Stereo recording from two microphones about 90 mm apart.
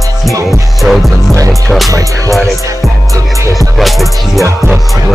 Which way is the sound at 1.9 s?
40° right (ahead or behind).